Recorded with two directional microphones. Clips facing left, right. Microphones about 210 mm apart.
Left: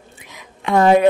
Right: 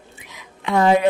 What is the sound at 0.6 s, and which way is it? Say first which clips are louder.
Speech: left 3 dB; 50° left (ahead or behind).